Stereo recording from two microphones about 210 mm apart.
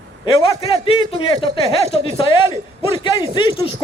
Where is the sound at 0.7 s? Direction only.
25° left (ahead or behind).